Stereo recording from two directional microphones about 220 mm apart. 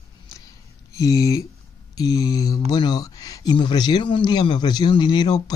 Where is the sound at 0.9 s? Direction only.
15° left (ahead or behind).